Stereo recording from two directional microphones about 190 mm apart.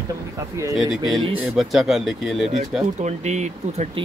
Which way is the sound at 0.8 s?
Centre (ahead or behind).